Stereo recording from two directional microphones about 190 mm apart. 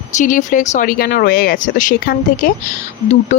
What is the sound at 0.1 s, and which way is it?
Speech, 40° left (ahead or behind).